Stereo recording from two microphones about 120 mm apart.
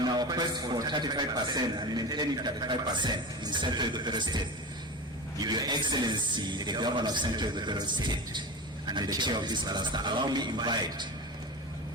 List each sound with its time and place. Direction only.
0.0 s a man's voice: 35° right (ahead or behind)
5.4 s a man's voice: 35° right (ahead or behind)